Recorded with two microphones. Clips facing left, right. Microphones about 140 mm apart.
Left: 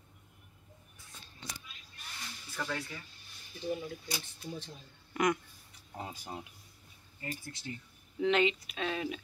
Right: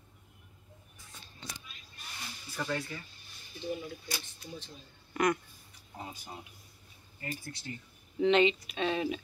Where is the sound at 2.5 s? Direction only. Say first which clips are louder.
Right 3 dB; 5° right (ahead or behind).